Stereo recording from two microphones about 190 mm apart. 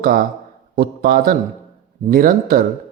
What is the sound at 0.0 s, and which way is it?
Speech, 50° right (ahead or behind).